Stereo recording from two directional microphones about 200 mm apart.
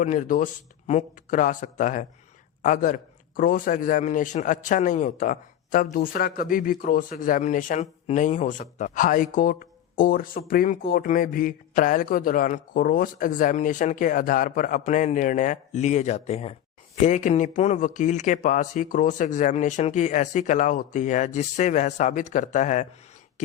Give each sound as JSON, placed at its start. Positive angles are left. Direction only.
{"t": 0.0, "sound": "a man's voice", "side_deg": 40}